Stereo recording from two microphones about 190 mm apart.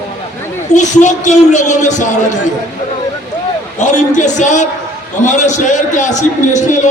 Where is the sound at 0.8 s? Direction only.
40° left (ahead or behind).